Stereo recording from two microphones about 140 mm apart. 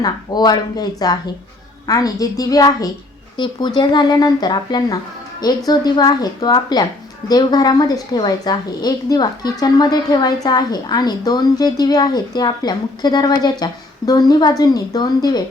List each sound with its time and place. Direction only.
0.0 s a woman's voice: 30° left (ahead or behind)